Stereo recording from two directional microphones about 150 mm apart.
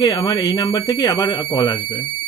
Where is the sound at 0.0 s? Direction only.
35° left (ahead or behind).